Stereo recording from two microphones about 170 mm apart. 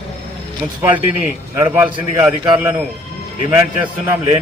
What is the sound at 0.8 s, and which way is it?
A man's voice, 15° right (ahead or behind).